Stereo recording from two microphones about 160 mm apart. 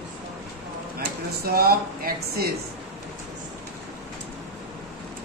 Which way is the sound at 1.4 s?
70° right (ahead or behind).